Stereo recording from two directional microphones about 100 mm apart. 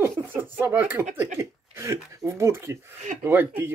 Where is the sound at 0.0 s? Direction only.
25° right (ahead or behind).